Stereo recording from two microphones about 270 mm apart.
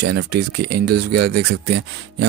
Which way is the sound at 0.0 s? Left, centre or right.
Right.